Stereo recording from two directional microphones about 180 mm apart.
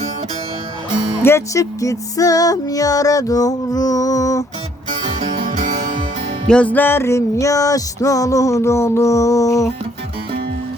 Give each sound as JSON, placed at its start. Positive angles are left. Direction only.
{"t": 1.2, "sound": "music", "side_deg": 15}
{"t": 5.2, "sound": "music", "side_deg": -45}
{"t": 6.5, "sound": "music", "side_deg": 5}